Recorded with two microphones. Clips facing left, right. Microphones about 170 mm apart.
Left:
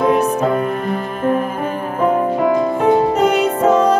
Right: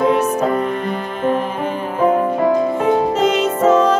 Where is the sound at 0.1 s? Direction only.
10° left (ahead or behind).